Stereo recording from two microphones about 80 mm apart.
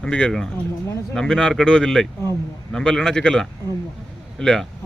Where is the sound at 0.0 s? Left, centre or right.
Centre.